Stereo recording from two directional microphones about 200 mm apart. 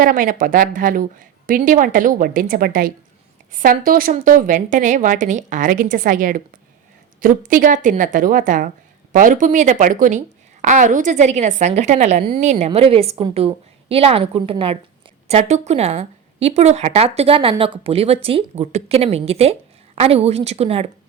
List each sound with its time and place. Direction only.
0.0 s a woman's voice: 45° right (ahead or behind)